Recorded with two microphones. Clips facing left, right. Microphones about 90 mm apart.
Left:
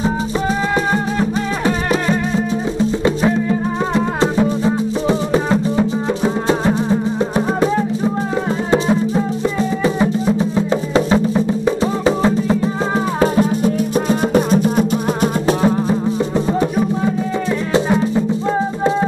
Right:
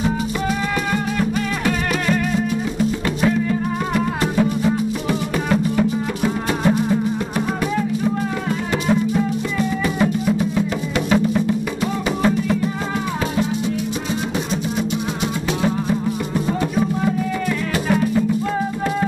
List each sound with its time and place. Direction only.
0.9 s music: 30° left (ahead or behind)
13.2 s music: 45° left (ahead or behind)
15.6 s music: 30° left (ahead or behind)
17.7 s music: 25° left (ahead or behind)